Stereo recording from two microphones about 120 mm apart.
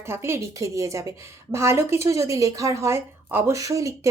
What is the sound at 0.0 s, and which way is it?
A woman's voice, 20° right (ahead or behind).